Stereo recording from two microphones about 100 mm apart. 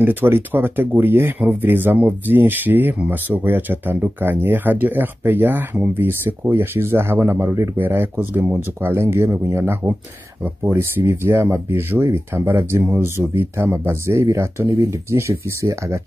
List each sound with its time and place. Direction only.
0.0 s speech: 20° right (ahead or behind)